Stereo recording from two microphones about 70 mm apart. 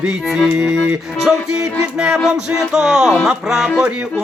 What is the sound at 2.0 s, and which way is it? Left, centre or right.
Music, centre.